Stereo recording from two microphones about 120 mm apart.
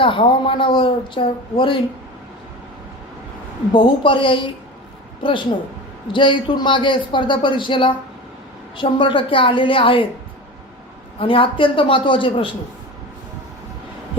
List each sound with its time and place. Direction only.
0.0 s speech: 50° left (ahead or behind)
3.7 s speech: 45° left (ahead or behind)
11.2 s speech: 50° left (ahead or behind)